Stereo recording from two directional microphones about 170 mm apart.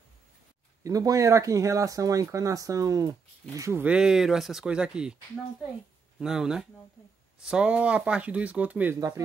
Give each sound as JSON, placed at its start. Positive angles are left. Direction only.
{"t": 0.8, "sound": "speech", "side_deg": -20}
{"t": 6.1, "sound": "speech", "side_deg": -5}